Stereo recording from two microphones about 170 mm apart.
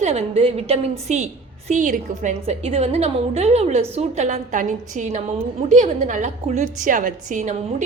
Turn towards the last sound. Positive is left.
turn(degrees=-45)  # may be behind; listen again after turning